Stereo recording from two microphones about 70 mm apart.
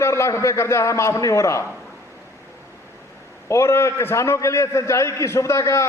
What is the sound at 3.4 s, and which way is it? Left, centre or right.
A man's voice, left.